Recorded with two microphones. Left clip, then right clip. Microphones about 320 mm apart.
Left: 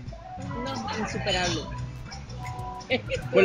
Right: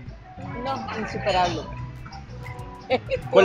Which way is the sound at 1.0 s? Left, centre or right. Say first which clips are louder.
Right 6 dB; right.